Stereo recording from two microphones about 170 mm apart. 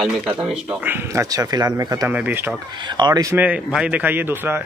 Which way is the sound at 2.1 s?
10° right (ahead or behind).